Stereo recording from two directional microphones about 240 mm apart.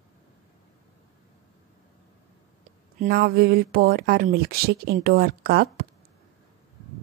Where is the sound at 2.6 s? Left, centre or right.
Right.